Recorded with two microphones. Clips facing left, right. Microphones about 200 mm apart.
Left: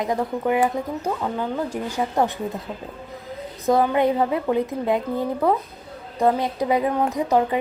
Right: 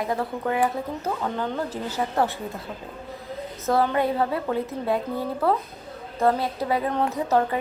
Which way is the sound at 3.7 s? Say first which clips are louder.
Left 4 dB; 20° left (ahead or behind).